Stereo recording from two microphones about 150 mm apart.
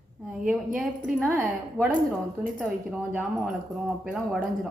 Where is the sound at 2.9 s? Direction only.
5° right (ahead or behind).